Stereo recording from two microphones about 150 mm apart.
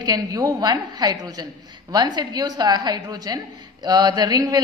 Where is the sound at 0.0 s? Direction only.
25° right (ahead or behind).